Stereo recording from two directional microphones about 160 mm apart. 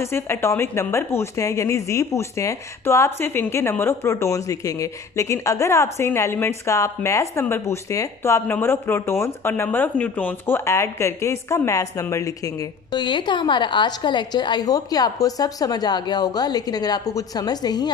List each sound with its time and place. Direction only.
0.0 s a woman's voice: 15° left (ahead or behind)